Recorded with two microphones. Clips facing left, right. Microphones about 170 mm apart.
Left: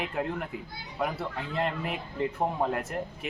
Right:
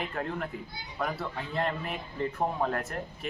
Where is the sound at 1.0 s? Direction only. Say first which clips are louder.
Left 2 dB; 15° left (ahead or behind).